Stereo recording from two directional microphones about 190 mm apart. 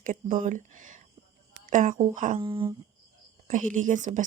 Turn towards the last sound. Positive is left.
turn(degrees=-40)  # may be behind; listen again after turning